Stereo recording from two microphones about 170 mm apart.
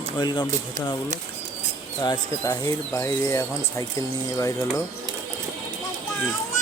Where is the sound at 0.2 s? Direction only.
25° left (ahead or behind).